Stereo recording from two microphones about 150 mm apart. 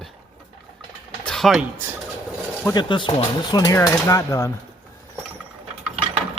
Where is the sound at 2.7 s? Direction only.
30° left (ahead or behind).